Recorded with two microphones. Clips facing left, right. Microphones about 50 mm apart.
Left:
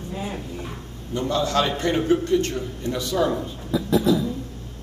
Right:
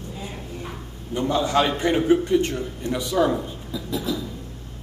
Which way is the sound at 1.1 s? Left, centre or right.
Centre.